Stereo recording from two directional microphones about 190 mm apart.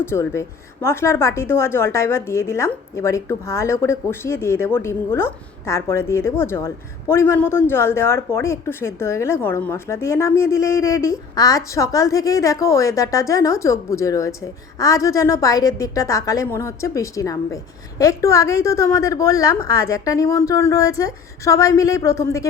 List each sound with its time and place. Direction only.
0.0 s speech: 15° left (ahead or behind)